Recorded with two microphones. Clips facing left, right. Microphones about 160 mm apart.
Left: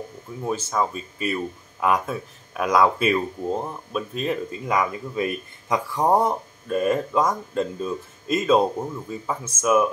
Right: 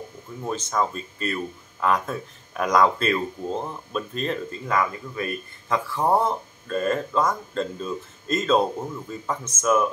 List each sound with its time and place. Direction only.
0.4 s speech: 10° left (ahead or behind)